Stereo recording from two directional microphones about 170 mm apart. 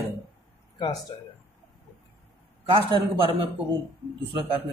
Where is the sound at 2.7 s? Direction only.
30° right (ahead or behind).